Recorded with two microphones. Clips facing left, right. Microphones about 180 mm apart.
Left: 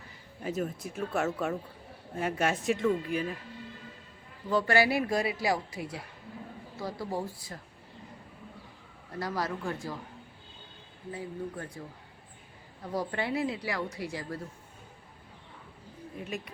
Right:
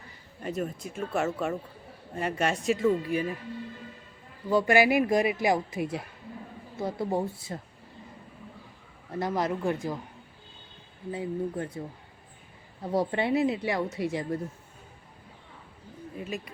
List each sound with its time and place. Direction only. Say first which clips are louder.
0.4 s speech: right 1 dB; centre (ahead or behind)
4.4 s a man's voice: right 4 dB; 10° right (ahead or behind)
9.1 s a woman's voice: right 5 dB; 20° right (ahead or behind)
11.1 s a woman's voice: right 6 dB; 25° right (ahead or behind)
12.8 s a woman's voice: right 6 dB; 25° right (ahead or behind)
16.1 s speech: right 2 dB; centre (ahead or behind)